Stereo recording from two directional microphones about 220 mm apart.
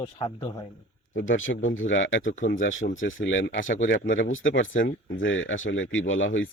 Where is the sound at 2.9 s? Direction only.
60° left (ahead or behind).